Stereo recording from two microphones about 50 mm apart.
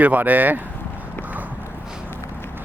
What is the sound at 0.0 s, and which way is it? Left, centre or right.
Speech, right.